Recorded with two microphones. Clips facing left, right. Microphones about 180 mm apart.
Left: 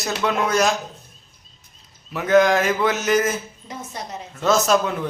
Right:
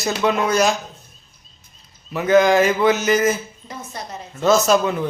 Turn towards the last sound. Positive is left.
turn(degrees=0)  # may be behind; listen again after turning